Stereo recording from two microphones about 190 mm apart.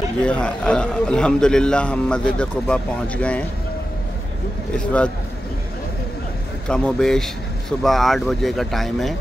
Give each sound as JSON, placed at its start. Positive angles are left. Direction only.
{"t": 0.2, "sound": "a man's voice", "side_deg": 5}
{"t": 4.7, "sound": "a man's voice", "side_deg": 5}
{"t": 6.7, "sound": "a man's voice", "side_deg": 5}